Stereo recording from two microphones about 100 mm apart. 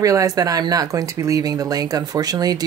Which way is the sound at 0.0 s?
35° right (ahead or behind).